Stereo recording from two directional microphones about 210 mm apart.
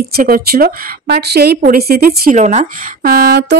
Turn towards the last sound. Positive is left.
turn(degrees=-50)  # may be behind; listen again after turning